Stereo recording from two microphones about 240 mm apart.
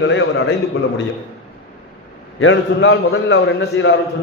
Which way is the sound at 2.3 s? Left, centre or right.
Left.